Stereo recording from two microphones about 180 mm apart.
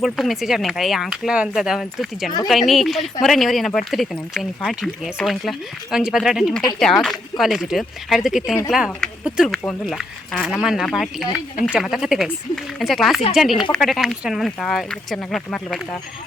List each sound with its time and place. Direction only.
0.0 s speech: centre (ahead or behind)